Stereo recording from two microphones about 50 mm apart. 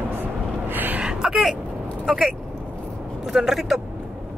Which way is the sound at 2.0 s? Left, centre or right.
Centre.